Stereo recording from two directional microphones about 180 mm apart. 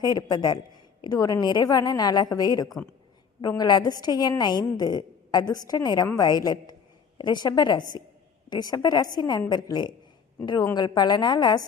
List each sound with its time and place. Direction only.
0.0 s a woman's voice: 20° left (ahead or behind)